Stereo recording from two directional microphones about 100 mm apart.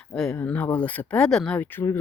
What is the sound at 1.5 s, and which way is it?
Speech, 20° left (ahead or behind).